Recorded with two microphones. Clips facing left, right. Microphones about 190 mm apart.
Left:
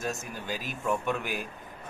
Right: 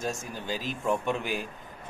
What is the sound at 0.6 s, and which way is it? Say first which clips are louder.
Speech: right 2 dB; 15° right (ahead or behind).